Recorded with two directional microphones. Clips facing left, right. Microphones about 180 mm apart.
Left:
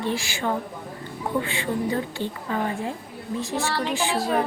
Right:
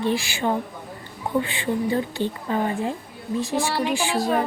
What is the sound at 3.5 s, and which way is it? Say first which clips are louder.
Speech: right 2 dB; 15° right (ahead or behind).